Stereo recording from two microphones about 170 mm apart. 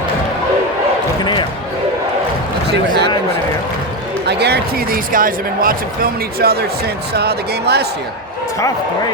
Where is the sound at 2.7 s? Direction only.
80° right.